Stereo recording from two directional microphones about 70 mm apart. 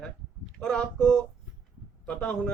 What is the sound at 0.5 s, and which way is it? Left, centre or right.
Speech, centre.